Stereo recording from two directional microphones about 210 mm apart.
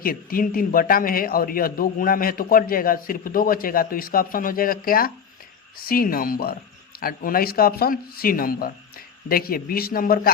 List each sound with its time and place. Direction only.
0.0 s a man's voice: 45° left (ahead or behind)